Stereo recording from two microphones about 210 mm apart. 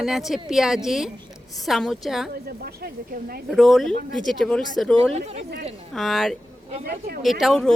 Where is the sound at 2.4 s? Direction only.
45° right (ahead or behind).